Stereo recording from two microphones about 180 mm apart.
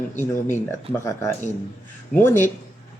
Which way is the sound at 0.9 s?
35° right (ahead or behind).